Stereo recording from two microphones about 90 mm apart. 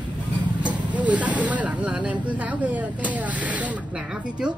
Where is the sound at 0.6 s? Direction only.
15° right (ahead or behind).